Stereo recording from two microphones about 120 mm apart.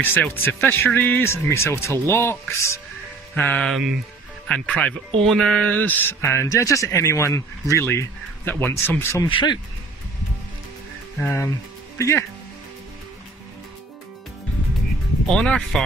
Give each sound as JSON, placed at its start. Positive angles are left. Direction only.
{"t": 0.0, "sound": "speech", "side_deg": 15}
{"t": 3.3, "sound": "speech", "side_deg": 10}
{"t": 9.3, "sound": "speech", "side_deg": 40}
{"t": 11.1, "sound": "speech", "side_deg": 20}
{"t": 15.2, "sound": "speech", "side_deg": 5}